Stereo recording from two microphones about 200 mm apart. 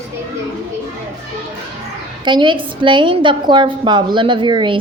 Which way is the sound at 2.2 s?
25° right (ahead or behind).